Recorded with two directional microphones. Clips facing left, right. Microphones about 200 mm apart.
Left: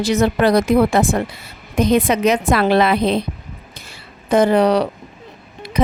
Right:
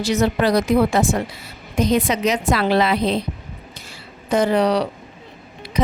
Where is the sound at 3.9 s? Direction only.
55° left (ahead or behind).